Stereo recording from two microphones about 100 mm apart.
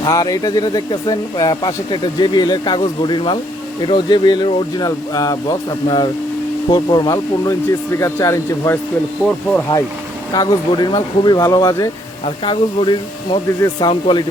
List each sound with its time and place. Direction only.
0.0 s speech: 40° left (ahead or behind)
9.2 s speech: 10° left (ahead or behind)
10.3 s speech: 40° left (ahead or behind)
12.5 s speech: 50° left (ahead or behind)